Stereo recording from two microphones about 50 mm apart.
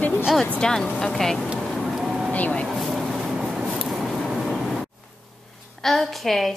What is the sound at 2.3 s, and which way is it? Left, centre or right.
Speech, left.